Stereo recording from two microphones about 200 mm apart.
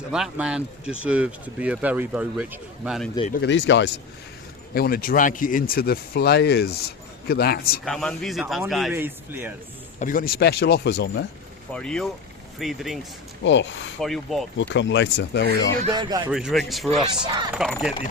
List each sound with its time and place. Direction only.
0.1 s speech: 5° right (ahead or behind)
3.3 s speech: 60° left (ahead or behind)
4.7 s speech: 50° left (ahead or behind)
7.9 s speech: centre (ahead or behind)
10.0 s speech: 45° left (ahead or behind)
11.7 s speech: 5° left (ahead or behind)
13.4 s speech: 65° left (ahead or behind)
14.0 s speech: centre (ahead or behind)
14.6 s speech: 65° left (ahead or behind)
15.9 s speech: 20° right (ahead or behind)
16.3 s speech: centre (ahead or behind)
16.9 s speech: 30° right (ahead or behind)
17.7 s speech: centre (ahead or behind)